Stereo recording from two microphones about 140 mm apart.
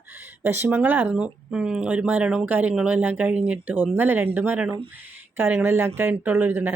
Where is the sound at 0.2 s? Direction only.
15° right (ahead or behind).